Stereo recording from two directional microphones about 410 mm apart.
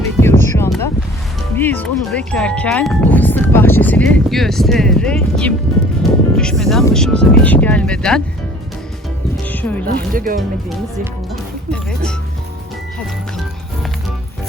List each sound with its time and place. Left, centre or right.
0.2 s music: centre
1.5 s speech: centre
9.5 s music: centre
9.8 s speech: centre
11.7 s speech: centre